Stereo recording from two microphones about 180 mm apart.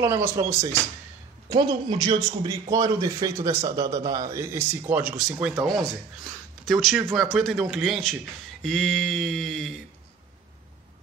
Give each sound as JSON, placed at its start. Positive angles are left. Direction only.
{"t": 0.0, "sound": "speech", "side_deg": -15}
{"t": 1.5, "sound": "a man's voice", "side_deg": -25}
{"t": 6.6, "sound": "a sound", "side_deg": 0}